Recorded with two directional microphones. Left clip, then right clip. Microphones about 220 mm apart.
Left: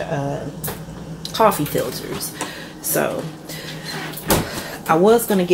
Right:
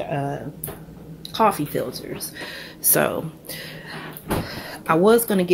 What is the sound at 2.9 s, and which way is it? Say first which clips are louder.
Speech: even; 25° right (ahead or behind).